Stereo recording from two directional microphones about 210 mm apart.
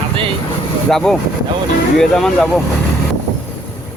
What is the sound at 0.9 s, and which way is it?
Speech, centre (ahead or behind).